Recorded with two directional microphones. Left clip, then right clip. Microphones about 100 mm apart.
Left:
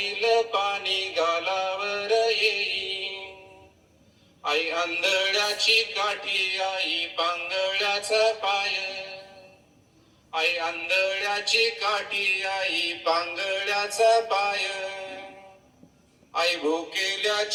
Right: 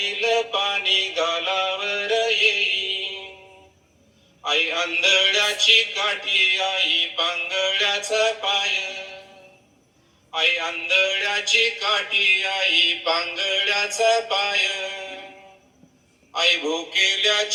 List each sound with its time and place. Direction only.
0.0 s music: 30° left (ahead or behind)
4.4 s music: 30° left (ahead or behind)
16.3 s music: 30° left (ahead or behind)